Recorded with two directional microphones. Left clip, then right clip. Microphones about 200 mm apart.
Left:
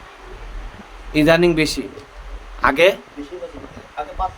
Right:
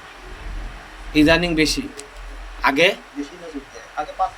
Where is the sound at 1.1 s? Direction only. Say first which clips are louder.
Left 2 dB; 40° left (ahead or behind).